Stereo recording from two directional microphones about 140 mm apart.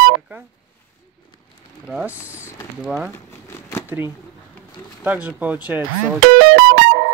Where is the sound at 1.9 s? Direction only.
10° right (ahead or behind).